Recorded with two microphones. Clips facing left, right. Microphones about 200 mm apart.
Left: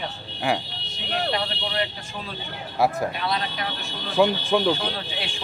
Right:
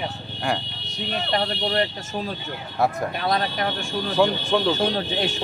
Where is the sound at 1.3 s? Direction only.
45° right (ahead or behind).